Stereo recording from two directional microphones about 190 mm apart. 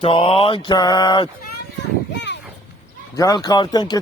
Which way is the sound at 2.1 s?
65° left (ahead or behind).